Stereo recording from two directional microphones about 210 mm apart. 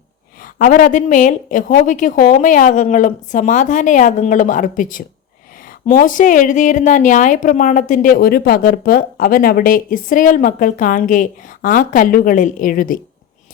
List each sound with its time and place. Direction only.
0.4 s a woman's voice: 40° left (ahead or behind)